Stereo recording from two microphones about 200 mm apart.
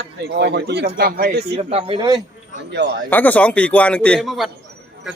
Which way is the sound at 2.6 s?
55° right (ahead or behind).